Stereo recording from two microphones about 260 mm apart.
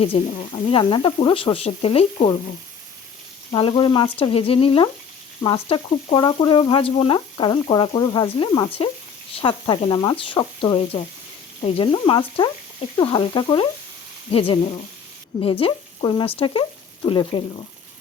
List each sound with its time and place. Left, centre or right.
0.0 s speech: left
3.5 s speech: centre